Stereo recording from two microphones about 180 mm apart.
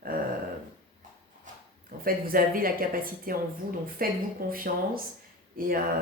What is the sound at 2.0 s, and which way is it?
Speech, 55° right (ahead or behind).